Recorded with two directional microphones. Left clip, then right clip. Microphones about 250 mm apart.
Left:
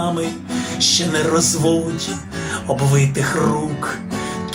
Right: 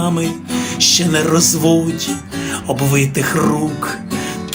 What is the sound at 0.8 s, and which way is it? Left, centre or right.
Music, right.